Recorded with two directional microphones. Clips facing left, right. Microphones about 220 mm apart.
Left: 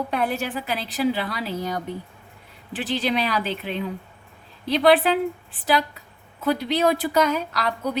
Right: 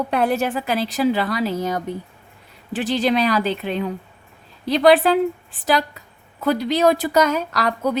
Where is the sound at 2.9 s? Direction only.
45° right (ahead or behind).